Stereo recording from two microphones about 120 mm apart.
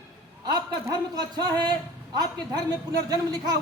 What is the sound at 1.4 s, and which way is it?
Speech, 35° right (ahead or behind).